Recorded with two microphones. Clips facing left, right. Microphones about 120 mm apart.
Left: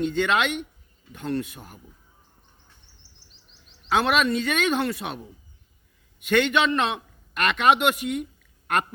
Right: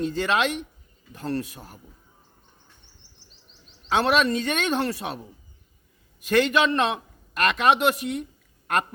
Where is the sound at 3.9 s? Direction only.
35° right (ahead or behind).